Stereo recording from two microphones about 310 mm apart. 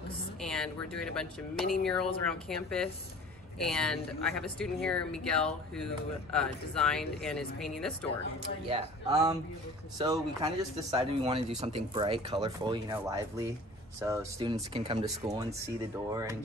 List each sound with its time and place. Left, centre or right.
0.4 s speech: centre
3.5 s speech: centre
8.6 s speech: centre